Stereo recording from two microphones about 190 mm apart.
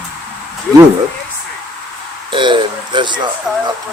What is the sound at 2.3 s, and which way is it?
Speech, 25° right (ahead or behind).